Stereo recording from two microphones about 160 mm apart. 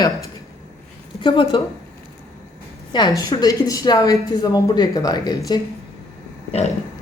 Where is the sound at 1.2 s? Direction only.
30° left (ahead or behind).